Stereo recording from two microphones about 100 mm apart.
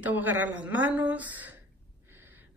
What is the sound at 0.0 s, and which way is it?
A woman's voice, 15° right (ahead or behind).